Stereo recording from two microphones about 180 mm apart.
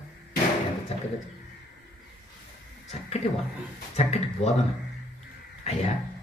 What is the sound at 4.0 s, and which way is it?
Carnatic music, 35° left (ahead or behind).